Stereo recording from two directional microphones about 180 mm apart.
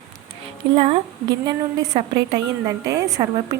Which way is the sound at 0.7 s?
30° right (ahead or behind).